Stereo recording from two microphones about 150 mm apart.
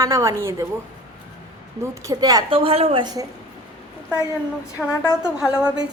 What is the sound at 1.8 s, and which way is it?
Speech, 25° right (ahead or behind).